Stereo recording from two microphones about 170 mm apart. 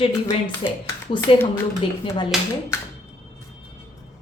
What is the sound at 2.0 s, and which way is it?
Speech, 25° left (ahead or behind).